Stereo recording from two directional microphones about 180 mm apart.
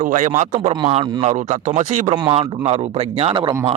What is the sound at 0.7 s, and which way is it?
Speech, 30° right (ahead or behind).